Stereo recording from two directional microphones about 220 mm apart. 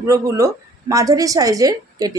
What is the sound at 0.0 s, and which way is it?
Speech, 15° right (ahead or behind).